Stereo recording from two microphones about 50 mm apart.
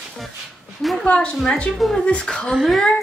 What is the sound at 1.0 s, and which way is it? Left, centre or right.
Speech, left.